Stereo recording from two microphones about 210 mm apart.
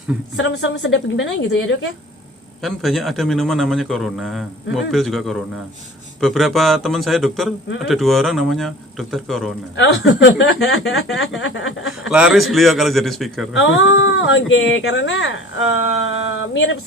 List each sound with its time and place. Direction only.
0.3 s speech: 60° left (ahead or behind)
2.6 s a man's voice: centre (ahead or behind)
9.7 s speech: 55° left (ahead or behind)
12.1 s a man's voice: 5° right (ahead or behind)
13.6 s speech: 60° left (ahead or behind)